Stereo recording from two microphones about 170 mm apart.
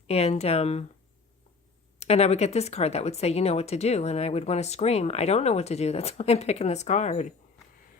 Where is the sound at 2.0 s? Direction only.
40° left (ahead or behind).